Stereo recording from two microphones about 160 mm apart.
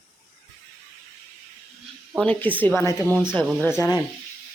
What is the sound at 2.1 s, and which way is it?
Speech, 10° left (ahead or behind).